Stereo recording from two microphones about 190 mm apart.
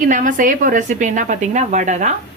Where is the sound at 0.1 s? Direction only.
45° right (ahead or behind).